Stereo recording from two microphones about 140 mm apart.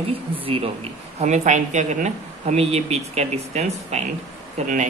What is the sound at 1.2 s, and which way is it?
A man's voice, 60° right (ahead or behind).